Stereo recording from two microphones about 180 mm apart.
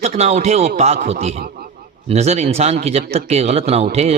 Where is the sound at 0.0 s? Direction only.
40° right (ahead or behind).